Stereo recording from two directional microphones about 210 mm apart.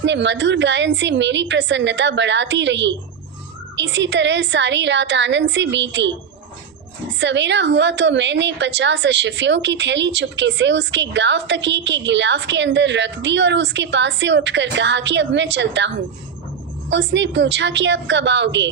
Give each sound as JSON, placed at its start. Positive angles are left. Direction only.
{"t": 0.0, "sound": "a woman's voice", "side_deg": -55}
{"t": 7.2, "sound": "a woman's voice", "side_deg": -60}
{"t": 16.9, "sound": "a woman's voice", "side_deg": -55}